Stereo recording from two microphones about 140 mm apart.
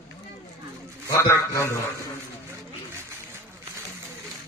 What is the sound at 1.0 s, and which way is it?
Speech, 20° left (ahead or behind).